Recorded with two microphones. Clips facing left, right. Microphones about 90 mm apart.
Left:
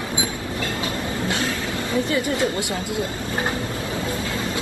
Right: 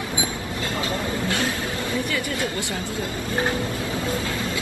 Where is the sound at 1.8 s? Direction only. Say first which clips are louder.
Left 6 dB; 25° left (ahead or behind).